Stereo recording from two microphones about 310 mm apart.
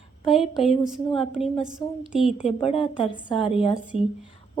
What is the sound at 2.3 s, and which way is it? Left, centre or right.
Speech, centre.